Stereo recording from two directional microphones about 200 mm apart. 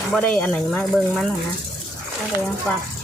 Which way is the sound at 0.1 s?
5° left (ahead or behind).